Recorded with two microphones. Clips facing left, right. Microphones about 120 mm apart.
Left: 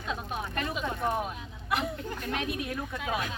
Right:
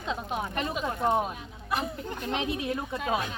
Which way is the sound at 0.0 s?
20° right (ahead or behind).